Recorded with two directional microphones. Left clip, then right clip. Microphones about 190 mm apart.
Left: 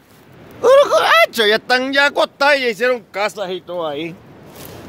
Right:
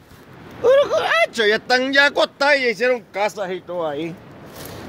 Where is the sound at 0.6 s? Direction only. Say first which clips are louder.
Left 5 dB; 45° left (ahead or behind); by 4.2 s 5° left (ahead or behind).